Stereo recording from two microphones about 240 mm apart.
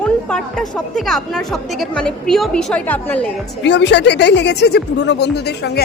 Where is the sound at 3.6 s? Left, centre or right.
Left.